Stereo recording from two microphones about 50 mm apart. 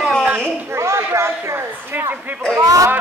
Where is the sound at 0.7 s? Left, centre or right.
Right.